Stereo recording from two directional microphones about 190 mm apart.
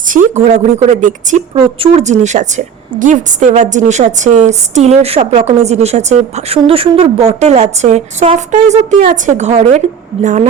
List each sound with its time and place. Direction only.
0.1 s a woman's voice: 40° right (ahead or behind)